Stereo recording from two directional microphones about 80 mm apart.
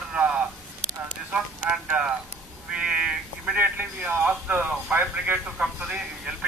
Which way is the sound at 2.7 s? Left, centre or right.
Centre.